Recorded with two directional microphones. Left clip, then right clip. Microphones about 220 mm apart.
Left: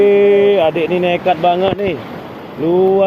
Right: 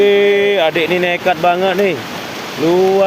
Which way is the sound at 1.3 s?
10° right (ahead or behind).